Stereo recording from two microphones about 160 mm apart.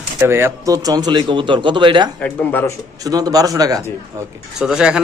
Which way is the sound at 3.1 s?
25° right (ahead or behind).